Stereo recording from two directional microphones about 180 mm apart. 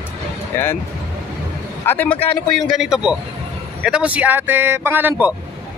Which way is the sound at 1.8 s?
10° left (ahead or behind).